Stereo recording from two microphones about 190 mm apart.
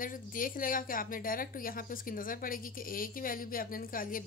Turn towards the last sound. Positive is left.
turn(degrees=45)  # may be behind; listen again after turning